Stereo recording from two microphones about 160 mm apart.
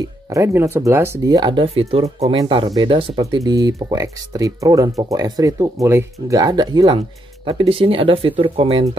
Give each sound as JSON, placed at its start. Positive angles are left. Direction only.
{"t": 0.3, "sound": "speech", "side_deg": -15}